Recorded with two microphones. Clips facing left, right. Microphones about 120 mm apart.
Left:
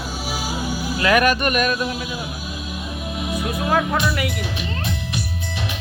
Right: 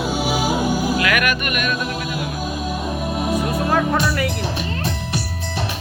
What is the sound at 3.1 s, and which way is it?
Music, 45° right (ahead or behind).